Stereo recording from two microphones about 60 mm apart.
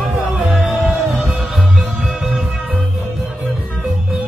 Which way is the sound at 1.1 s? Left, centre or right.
Right.